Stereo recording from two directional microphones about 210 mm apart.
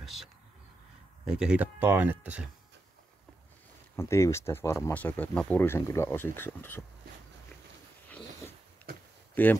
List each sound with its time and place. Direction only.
0.0 s a sound: centre (ahead or behind)
1.3 s speech: 5° right (ahead or behind)
3.9 s speech: 15° left (ahead or behind)
9.3 s speech: 10° left (ahead or behind)